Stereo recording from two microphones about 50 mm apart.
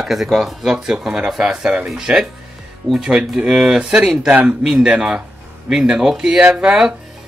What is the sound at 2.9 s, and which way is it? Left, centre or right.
Speech, centre.